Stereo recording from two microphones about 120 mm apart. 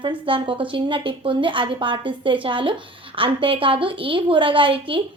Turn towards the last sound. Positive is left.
turn(degrees=-45)  # may be behind; listen again after turning